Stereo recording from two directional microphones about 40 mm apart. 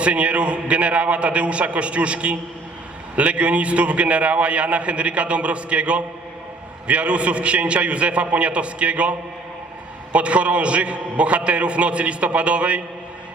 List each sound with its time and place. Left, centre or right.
0.0 s a man's voice: right